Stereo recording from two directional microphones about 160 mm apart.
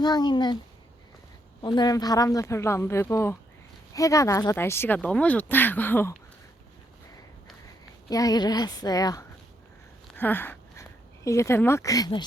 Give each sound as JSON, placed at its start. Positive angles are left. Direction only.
{"t": 0.0, "sound": "speech", "side_deg": 25}
{"t": 1.6, "sound": "speech", "side_deg": 25}
{"t": 8.1, "sound": "speech", "side_deg": 25}
{"t": 10.2, "sound": "speech", "side_deg": 10}